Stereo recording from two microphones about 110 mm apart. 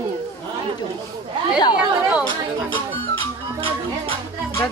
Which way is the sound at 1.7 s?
10° right (ahead or behind).